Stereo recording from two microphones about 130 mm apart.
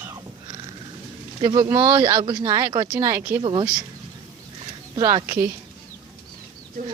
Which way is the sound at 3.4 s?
35° right (ahead or behind).